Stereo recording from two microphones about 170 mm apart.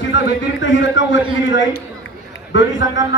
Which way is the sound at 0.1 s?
90° left.